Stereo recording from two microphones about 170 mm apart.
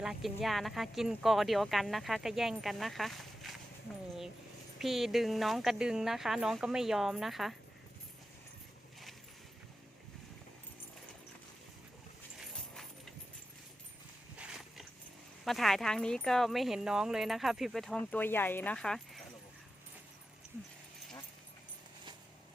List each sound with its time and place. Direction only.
0.0 s speech: centre (ahead or behind)
4.8 s speech: centre (ahead or behind)
12.4 s horse: centre (ahead or behind)
14.3 s walk: 5° right (ahead or behind)
15.4 s speech: centre (ahead or behind)